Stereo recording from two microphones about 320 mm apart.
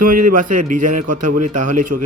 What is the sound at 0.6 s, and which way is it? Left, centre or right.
A man's voice, right.